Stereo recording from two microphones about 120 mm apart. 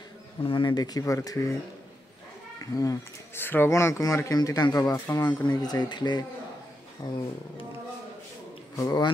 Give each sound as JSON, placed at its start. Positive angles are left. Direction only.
{"t": 0.4, "sound": "speech", "side_deg": 45}
{"t": 2.6, "sound": "speech", "side_deg": 30}
{"t": 5.5, "sound": "speech", "side_deg": 35}
{"t": 8.7, "sound": "speech", "side_deg": 30}